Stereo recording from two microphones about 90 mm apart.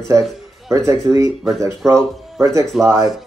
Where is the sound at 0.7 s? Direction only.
35° right (ahead or behind).